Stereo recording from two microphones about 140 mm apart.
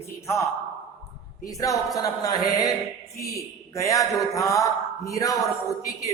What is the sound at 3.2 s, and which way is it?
Speech, 25° left (ahead or behind).